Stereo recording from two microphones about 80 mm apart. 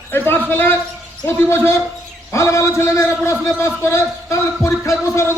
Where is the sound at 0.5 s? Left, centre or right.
Left.